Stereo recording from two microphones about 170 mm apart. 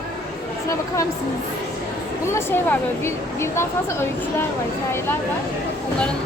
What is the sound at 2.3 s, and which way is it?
A woman's voice, 15° left (ahead or behind).